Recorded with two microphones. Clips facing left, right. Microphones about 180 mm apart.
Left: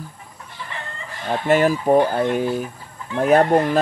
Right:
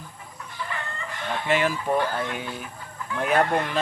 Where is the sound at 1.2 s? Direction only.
40° left (ahead or behind).